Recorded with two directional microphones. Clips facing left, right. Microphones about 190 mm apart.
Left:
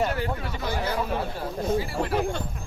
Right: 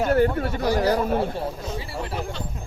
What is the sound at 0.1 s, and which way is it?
Speech, 50° right (ahead or behind).